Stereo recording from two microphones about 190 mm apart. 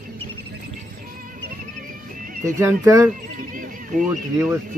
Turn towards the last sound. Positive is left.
turn(degrees=-10)  # may be behind; listen again after turning